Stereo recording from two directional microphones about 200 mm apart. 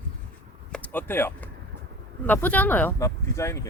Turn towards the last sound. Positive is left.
turn(degrees=15)  # may be behind; listen again after turning